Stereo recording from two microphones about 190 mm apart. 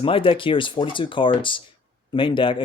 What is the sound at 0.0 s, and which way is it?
Speech, 30° left (ahead or behind).